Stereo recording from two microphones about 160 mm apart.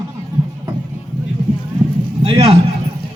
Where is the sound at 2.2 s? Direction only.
35° right (ahead or behind).